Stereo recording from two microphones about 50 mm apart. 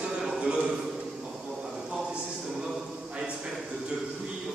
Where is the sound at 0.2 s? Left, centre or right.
Centre.